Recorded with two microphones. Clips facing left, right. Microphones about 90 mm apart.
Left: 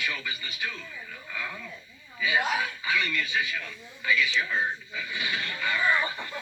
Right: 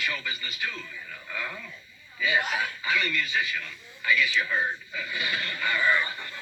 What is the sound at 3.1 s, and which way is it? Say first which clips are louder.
Speech: even; 25° left (ahead or behind).